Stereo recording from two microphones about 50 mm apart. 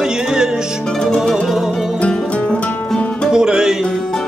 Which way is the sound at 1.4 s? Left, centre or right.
Centre.